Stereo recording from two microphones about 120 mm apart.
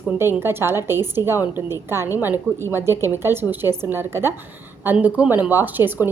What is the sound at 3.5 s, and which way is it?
A woman's voice, 15° right (ahead or behind).